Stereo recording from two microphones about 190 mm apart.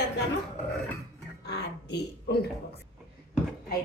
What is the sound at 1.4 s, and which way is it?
Speech, 60° left (ahead or behind).